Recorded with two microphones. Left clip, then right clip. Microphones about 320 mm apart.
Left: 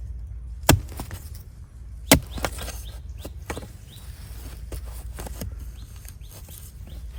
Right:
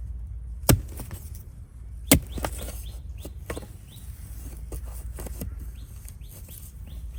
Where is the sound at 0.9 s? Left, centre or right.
Left.